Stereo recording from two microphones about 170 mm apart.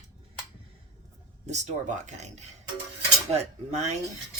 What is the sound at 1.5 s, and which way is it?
Speech, 45° right (ahead or behind).